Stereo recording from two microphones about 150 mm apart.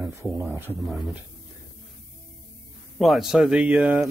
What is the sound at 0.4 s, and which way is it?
Speech, 15° right (ahead or behind).